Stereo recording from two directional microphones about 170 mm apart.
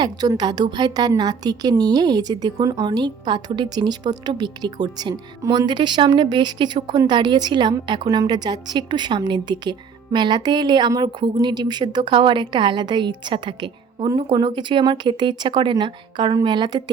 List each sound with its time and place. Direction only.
0.0 s a woman's voice: 25° right (ahead or behind)